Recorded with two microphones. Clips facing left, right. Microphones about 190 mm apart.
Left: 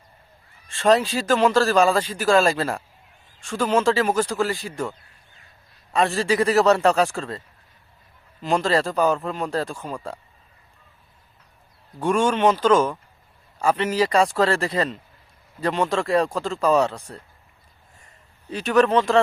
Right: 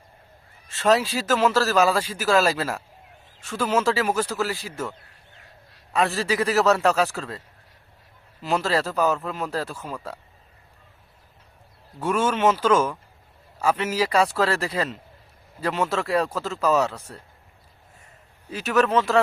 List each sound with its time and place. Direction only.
0.7 s a man's voice: 5° right (ahead or behind)
5.9 s a man's voice: centre (ahead or behind)
11.9 s a man's voice: 5° right (ahead or behind)
18.4 s a man's voice: 5° right (ahead or behind)